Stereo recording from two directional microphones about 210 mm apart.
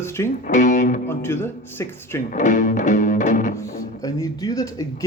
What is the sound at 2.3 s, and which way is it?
Music, 35° left (ahead or behind).